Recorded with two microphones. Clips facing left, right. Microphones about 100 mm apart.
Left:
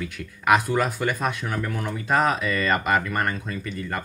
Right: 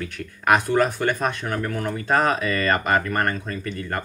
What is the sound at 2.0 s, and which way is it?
Speech, 50° right (ahead or behind).